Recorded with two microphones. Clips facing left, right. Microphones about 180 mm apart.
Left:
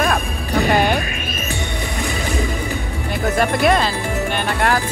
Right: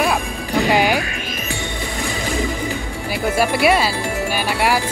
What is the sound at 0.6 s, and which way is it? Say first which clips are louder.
Music: even; 15° right (ahead or behind).